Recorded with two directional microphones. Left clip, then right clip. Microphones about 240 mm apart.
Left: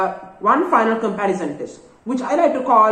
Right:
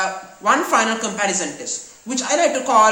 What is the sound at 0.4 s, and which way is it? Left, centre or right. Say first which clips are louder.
Speech: left 1 dB; right.